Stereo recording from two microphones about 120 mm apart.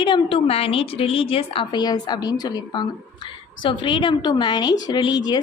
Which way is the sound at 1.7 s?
35° left (ahead or behind).